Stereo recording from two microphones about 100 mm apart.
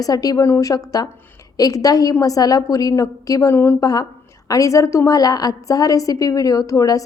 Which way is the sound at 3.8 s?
40° left (ahead or behind).